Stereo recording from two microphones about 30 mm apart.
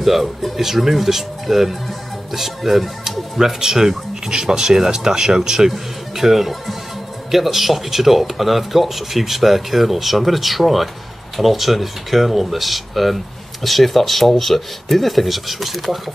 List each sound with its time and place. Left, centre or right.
0.0 s speech: centre
6.1 s speech: centre